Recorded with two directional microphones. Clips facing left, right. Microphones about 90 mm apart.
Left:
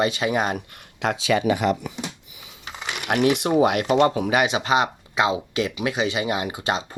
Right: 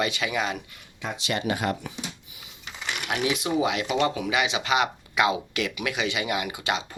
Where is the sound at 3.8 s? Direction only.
40° left (ahead or behind).